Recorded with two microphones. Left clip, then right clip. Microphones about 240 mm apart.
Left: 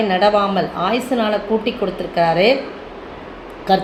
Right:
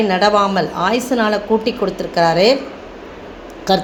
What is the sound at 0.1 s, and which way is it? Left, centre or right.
A woman's voice, right.